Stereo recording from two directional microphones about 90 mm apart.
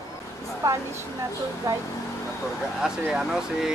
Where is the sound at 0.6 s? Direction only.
40° right (ahead or behind).